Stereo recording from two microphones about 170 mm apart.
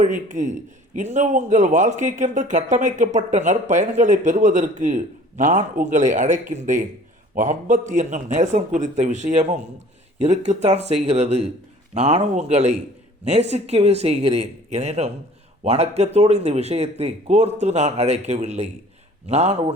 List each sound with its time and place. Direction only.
0.0 s speech: 50° right (ahead or behind)